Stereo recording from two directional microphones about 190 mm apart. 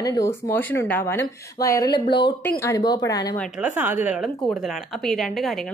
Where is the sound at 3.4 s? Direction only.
5° right (ahead or behind).